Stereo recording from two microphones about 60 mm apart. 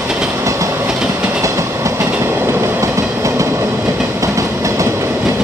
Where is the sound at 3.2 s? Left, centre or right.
Right.